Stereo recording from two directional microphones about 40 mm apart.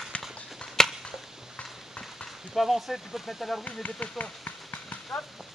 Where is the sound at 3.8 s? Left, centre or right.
Left.